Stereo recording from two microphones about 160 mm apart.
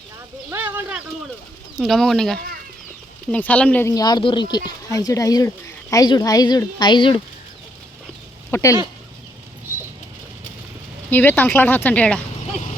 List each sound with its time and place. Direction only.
0.5 s a sound: 10° right (ahead or behind)
1.8 s speech: centre (ahead or behind); by 7.2 s 30° left (ahead or behind)
8.4 s speech: 15° left (ahead or behind)
11.1 s speech: 10° left (ahead or behind)